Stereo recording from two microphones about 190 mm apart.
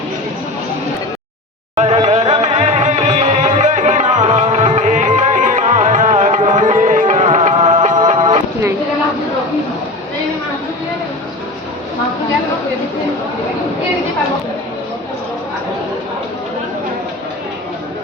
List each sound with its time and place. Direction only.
1.7 s music: 35° right (ahead or behind)